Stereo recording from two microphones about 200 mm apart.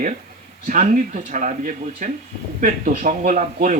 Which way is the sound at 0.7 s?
40° right (ahead or behind).